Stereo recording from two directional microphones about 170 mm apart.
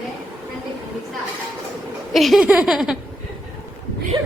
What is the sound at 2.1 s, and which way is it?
Speech, centre (ahead or behind).